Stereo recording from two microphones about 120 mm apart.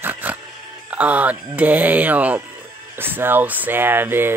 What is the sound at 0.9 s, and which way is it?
Speech, 10° right (ahead or behind).